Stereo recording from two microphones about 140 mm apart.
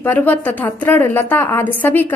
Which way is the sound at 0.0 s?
15° left (ahead or behind).